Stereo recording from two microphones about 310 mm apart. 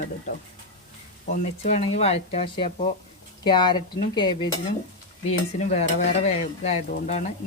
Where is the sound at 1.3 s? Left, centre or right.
Left.